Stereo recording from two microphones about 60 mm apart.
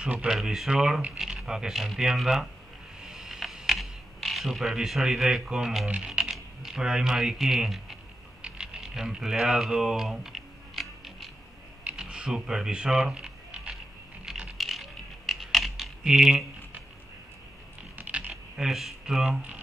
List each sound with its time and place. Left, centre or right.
0.0 s speech: centre
0.3 s speech: centre
3.0 s mechanisms: centre
5.9 s music: centre
6.3 s speech: centre
8.4 s a sound: centre
14.3 s music: centre
14.6 s a sound: centre
16.0 s speech: centre
17.9 s a sound: right
18.6 s speech: centre